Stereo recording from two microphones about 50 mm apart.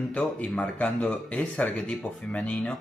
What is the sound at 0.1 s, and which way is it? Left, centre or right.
Speech, left.